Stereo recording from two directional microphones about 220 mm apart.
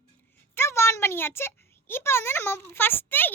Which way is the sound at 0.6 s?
10° left (ahead or behind).